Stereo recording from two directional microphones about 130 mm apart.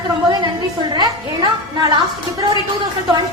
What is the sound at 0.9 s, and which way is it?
Speech, 35° right (ahead or behind).